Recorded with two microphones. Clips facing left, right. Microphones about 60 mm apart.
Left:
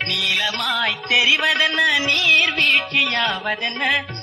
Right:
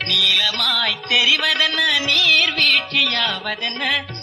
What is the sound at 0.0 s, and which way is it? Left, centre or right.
Music, centre.